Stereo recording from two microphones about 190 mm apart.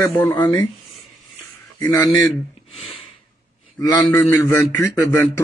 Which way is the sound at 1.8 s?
20° left (ahead or behind).